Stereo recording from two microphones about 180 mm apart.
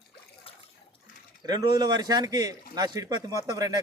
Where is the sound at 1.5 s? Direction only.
20° right (ahead or behind).